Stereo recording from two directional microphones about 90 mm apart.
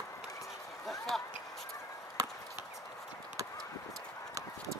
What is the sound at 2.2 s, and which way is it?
Chop, 40° right (ahead or behind).